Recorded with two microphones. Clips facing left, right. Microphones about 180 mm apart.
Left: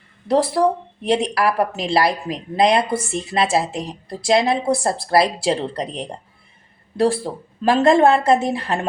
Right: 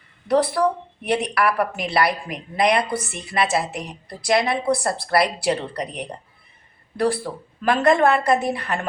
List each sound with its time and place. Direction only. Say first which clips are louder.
0.3 s a woman's voice: left 2 dB; 25° left (ahead or behind)